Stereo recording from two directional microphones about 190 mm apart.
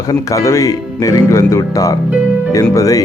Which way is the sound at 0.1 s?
15° left (ahead or behind).